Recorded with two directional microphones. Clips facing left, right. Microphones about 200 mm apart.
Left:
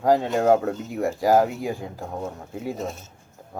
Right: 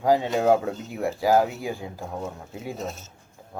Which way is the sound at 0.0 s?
5° right (ahead or behind).